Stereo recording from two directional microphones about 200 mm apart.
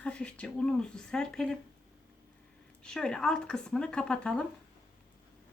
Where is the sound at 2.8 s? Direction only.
5° left (ahead or behind).